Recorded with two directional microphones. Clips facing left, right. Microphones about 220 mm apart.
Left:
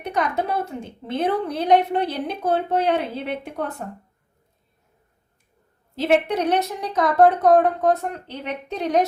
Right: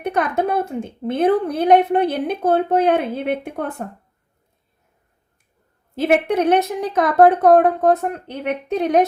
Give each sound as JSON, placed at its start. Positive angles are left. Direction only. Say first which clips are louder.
{"t": 0.0, "sound": "a woman's voice", "louder": "right 4 dB", "side_deg": -55}
{"t": 6.0, "sound": "a woman's voice", "louder": "right 3 dB", "side_deg": -55}